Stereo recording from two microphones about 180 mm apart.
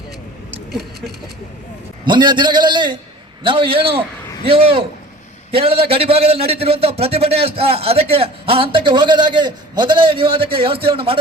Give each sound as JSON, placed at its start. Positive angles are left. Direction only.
{"t": 2.0, "sound": "a man's voice", "side_deg": -25}